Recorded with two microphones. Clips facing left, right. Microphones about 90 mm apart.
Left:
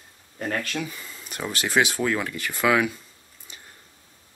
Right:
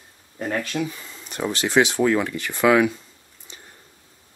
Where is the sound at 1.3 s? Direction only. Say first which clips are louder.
Right 4 dB; 30° right (ahead or behind).